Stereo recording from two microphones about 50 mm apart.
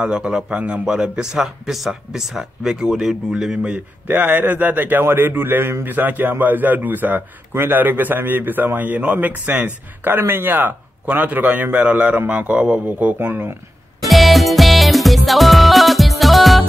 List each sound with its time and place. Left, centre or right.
0.0 s a man's voice: right
0.6 s a man's voice: right
0.8 s speech: centre
3.6 s a man's voice: right
10.0 s a man's voice: right
12.8 s a man's voice: right
14.0 s music: centre